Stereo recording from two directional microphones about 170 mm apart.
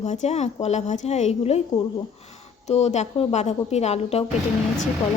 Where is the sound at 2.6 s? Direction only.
40° left (ahead or behind).